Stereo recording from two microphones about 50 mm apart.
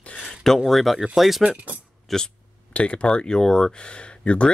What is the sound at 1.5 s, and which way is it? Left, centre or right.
Speech, right.